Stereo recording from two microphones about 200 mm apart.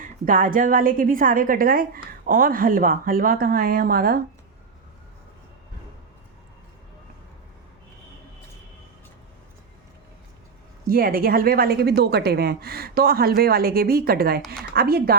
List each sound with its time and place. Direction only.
0.0 s a woman's voice: 40° right (ahead or behind)
10.8 s a woman's voice: 45° right (ahead or behind)